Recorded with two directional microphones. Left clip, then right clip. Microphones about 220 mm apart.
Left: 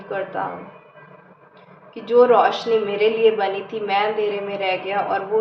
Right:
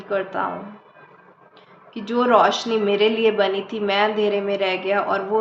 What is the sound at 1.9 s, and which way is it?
A woman's voice, 50° right (ahead or behind).